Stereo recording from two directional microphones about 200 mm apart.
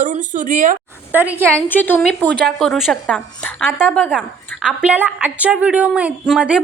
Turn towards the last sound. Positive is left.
turn(degrees=-5)  # may be behind; listen again after turning